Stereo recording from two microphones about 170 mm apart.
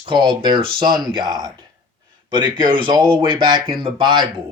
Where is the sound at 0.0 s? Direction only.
30° right (ahead or behind).